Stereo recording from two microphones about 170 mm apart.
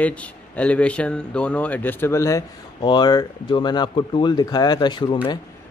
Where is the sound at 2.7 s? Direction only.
25° left (ahead or behind).